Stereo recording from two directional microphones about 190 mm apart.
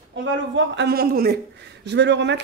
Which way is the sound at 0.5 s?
65° right (ahead or behind).